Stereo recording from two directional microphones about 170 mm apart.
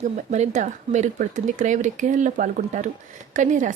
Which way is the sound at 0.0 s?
45° right (ahead or behind).